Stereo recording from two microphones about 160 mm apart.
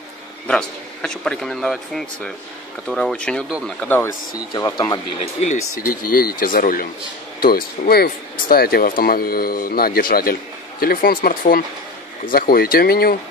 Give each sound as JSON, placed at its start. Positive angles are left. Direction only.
{"t": 0.5, "sound": "speech", "side_deg": 5}
{"t": 4.6, "sound": "speech", "side_deg": 20}
{"t": 5.4, "sound": "speech", "side_deg": 55}